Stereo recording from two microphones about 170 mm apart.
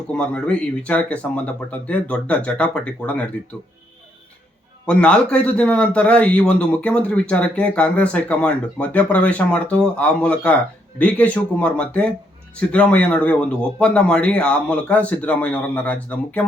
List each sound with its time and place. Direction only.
0.1 s a man's voice: 5° left (ahead or behind)
4.9 s a man's voice: 5° left (ahead or behind)